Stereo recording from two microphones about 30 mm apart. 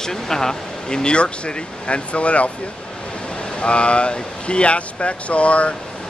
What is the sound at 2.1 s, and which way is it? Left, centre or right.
Speech, left.